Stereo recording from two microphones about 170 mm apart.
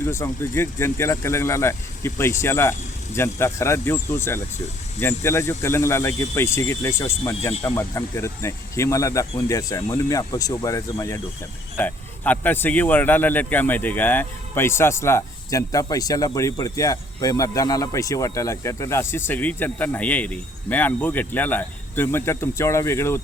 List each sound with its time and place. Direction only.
0.0 s speech: 15° left (ahead or behind)